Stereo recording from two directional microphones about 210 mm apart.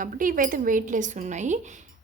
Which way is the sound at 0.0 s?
40° right (ahead or behind).